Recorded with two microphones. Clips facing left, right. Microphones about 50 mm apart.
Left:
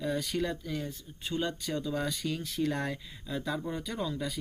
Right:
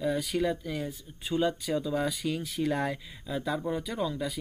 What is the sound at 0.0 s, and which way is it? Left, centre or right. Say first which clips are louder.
Speech: right 3 dB; centre.